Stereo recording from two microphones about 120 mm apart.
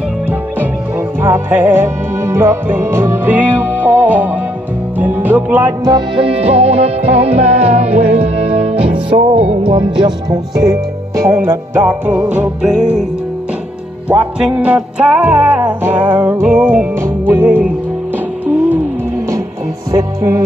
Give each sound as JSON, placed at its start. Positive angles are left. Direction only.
{"t": 0.3, "sound": "music", "side_deg": -15}
{"t": 5.9, "sound": "music", "side_deg": -40}
{"t": 8.7, "sound": "music", "side_deg": -10}
{"t": 9.1, "sound": "music", "side_deg": -60}
{"t": 9.9, "sound": "music", "side_deg": -35}
{"t": 14.0, "sound": "music", "side_deg": -15}
{"t": 19.9, "sound": "music", "side_deg": -30}